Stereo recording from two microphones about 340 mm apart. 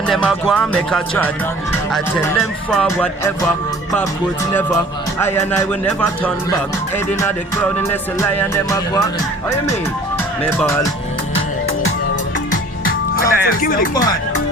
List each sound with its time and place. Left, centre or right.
0.1 s speech: centre
5.2 s speech: centre
7.2 s music: centre
10.4 s speech: centre
12.5 s music: left